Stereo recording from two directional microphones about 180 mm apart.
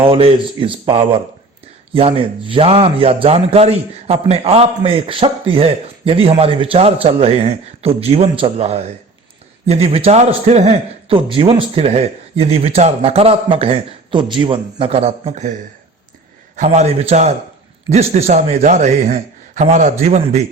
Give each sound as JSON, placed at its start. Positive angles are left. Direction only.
{"t": 0.0, "sound": "a man's voice", "side_deg": -30}
{"t": 16.6, "sound": "a man's voice", "side_deg": -40}